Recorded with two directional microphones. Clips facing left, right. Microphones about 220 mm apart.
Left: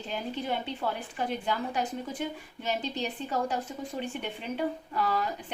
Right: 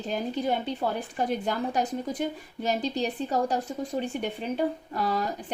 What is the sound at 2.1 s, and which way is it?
Speech, 40° right (ahead or behind).